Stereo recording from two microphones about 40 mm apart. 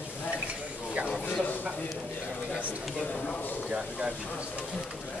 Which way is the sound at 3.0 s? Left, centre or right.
Left.